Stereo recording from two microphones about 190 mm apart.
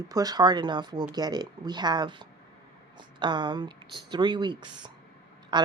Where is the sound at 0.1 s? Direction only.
20° right (ahead or behind).